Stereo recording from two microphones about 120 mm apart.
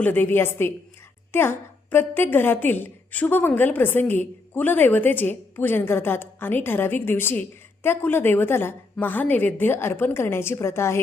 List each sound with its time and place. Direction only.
0.0 s a woman's voice: 15° left (ahead or behind)